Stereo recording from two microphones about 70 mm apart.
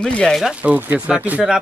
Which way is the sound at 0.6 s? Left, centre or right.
Right.